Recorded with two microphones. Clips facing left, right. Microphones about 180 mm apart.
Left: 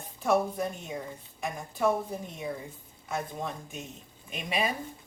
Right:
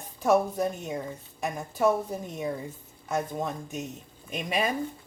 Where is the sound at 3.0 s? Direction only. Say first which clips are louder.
Right 4 dB; 40° right (ahead or behind).